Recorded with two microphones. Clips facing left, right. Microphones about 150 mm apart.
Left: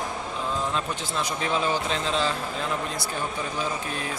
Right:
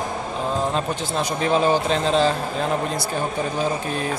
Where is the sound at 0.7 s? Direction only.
40° right (ahead or behind).